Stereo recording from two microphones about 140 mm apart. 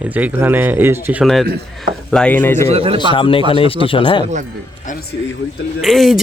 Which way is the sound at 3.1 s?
40° left (ahead or behind).